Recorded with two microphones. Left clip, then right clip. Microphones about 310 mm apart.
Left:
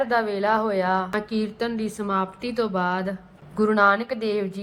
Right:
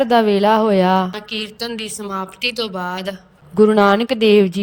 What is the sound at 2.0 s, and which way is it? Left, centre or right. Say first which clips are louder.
Speech: right 4 dB; centre.